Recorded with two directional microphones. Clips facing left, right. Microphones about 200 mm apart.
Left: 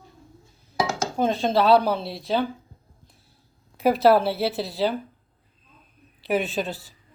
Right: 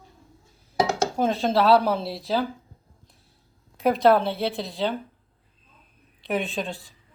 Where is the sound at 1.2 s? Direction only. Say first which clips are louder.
Left 2 dB; centre (ahead or behind).